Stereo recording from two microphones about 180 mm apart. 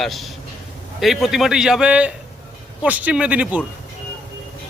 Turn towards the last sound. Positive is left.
turn(degrees=-10)  # may be behind; listen again after turning